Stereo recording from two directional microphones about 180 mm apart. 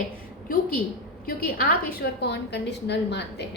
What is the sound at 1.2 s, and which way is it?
A woman's voice, 55° left (ahead or behind).